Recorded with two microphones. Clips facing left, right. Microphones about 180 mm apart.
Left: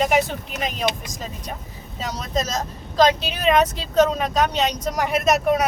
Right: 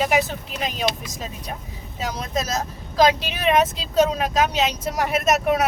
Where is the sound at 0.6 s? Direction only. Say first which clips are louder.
Even; 5° right (ahead or behind).